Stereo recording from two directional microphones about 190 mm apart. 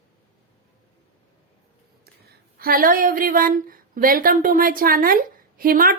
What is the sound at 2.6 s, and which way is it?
A woman's voice, 50° right (ahead or behind).